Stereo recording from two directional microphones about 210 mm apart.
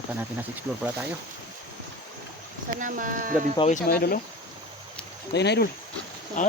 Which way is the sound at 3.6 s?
35° left (ahead or behind).